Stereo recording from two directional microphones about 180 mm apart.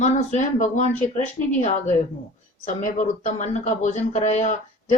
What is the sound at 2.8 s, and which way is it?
Speech, 40° left (ahead or behind).